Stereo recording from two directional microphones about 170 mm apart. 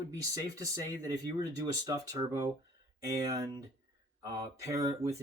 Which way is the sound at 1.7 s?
20° right (ahead or behind).